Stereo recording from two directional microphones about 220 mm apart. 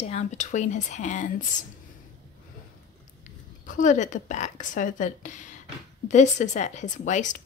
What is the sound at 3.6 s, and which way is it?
Speech, 35° left (ahead or behind).